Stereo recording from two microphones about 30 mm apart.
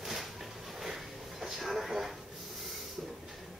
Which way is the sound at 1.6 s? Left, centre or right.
Centre.